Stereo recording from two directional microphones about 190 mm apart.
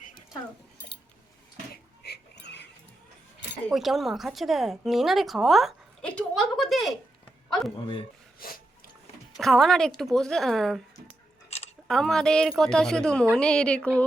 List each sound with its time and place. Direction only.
1.7 s a sound: 60° left (ahead or behind)
3.7 s a woman's voice: centre (ahead or behind)
7.8 s speech: 25° left (ahead or behind)
8.4 s snort: 50° left (ahead or behind)
9.4 s a woman's voice: centre (ahead or behind)
11.9 s a woman's voice: centre (ahead or behind)